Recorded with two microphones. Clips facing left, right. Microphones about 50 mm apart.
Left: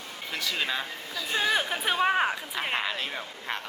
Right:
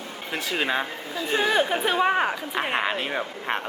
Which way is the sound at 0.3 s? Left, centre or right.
Right.